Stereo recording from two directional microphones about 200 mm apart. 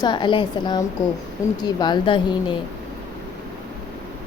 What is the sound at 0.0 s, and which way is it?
A woman's voice, 20° left (ahead or behind).